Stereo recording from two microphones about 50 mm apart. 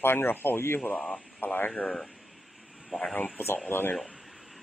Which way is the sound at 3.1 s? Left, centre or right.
Left.